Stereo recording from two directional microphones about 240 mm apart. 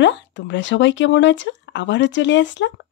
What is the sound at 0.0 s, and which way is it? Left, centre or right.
Speech, left.